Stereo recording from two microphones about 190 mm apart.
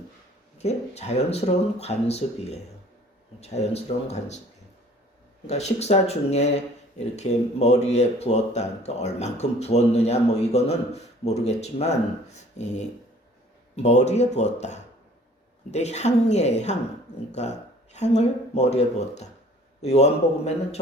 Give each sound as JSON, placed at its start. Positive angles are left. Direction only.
{"t": 0.6, "sound": "speech", "side_deg": 35}
{"t": 5.5, "sound": "speech", "side_deg": 35}